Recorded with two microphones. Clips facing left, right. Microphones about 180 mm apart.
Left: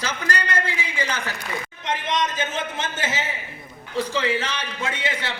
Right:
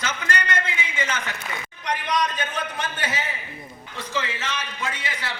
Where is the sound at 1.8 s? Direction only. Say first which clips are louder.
Even; 25° left (ahead or behind).